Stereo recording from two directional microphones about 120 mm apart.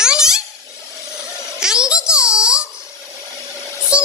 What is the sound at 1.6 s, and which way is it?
Music, 5° right (ahead or behind).